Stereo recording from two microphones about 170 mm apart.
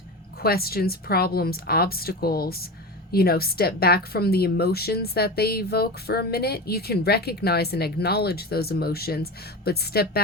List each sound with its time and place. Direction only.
0.4 s a woman's voice: 65° left (ahead or behind)